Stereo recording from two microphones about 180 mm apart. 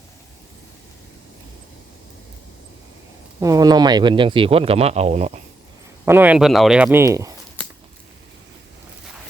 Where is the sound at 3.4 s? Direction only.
20° right (ahead or behind); by 5.4 s 40° right (ahead or behind).